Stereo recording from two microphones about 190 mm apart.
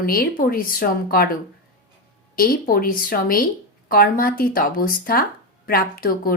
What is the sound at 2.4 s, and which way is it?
Speech, 50° left (ahead or behind).